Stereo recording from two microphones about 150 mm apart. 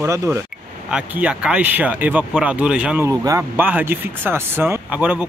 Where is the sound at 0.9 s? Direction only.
5° right (ahead or behind).